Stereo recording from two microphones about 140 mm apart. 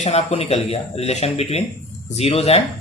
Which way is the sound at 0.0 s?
50° left (ahead or behind).